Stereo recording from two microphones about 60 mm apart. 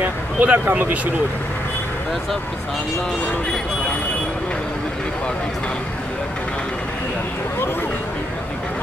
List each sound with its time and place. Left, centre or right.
0.0 s speech: right